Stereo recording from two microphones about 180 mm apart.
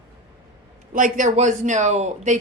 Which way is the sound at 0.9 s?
45° right (ahead or behind).